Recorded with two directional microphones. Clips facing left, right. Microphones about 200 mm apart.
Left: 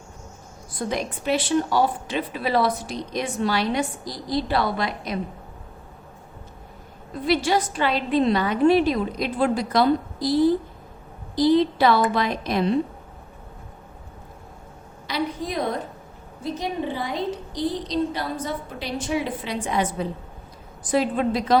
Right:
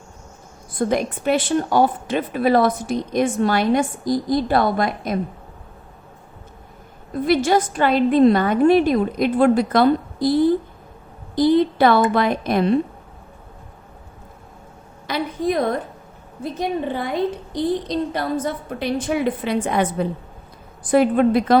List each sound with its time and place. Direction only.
0.8 s a woman's voice: 55° right (ahead or behind)
7.3 s a woman's voice: 50° right (ahead or behind)
15.0 s a sound: 50° right (ahead or behind)
16.4 s a woman's voice: 55° right (ahead or behind)